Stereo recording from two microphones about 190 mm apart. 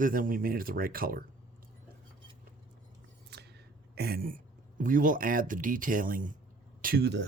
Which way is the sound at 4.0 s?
55° right (ahead or behind).